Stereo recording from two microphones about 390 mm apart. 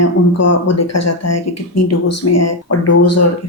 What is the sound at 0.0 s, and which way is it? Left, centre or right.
Speech, left.